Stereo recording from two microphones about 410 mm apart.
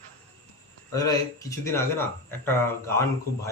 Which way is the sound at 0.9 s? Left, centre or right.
Centre.